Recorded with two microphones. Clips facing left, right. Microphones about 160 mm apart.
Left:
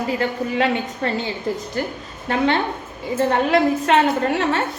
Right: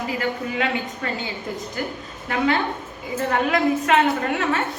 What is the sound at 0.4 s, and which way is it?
Speech, 40° left (ahead or behind).